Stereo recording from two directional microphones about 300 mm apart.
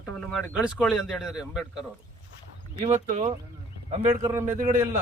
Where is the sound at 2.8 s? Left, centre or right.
Right.